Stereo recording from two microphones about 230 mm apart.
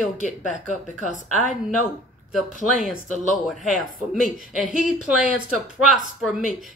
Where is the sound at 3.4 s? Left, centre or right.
Centre.